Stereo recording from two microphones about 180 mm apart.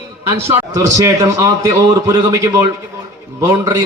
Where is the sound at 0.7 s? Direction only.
20° right (ahead or behind).